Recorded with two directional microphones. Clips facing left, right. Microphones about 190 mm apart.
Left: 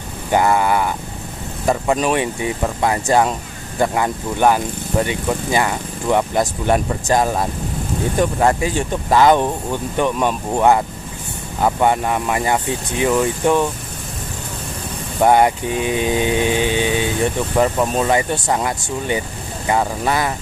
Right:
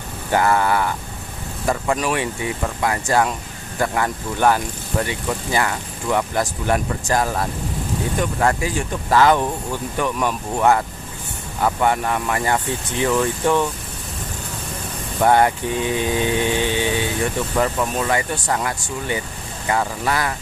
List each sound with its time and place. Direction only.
0.3 s speech: 15° left (ahead or behind)
15.1 s speech: 15° left (ahead or behind)